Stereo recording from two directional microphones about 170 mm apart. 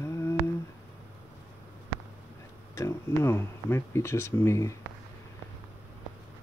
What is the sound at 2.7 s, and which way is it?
Speech, 15° left (ahead or behind).